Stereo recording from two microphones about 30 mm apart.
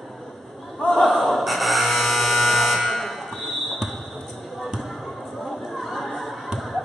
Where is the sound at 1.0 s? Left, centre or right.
Left.